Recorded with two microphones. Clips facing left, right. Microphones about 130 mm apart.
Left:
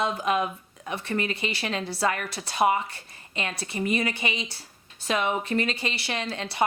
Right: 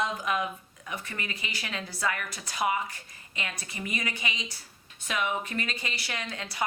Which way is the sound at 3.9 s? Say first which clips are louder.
Left 6 dB; 30° left (ahead or behind).